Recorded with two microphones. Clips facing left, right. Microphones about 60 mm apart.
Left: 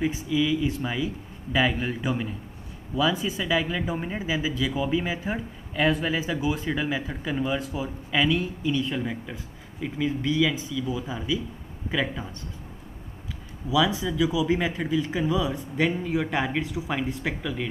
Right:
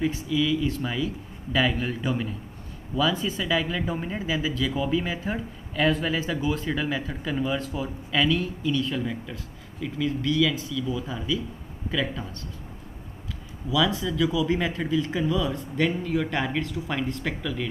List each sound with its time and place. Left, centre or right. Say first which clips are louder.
0.0 s speech: even; centre
13.7 s speech: left 1 dB; centre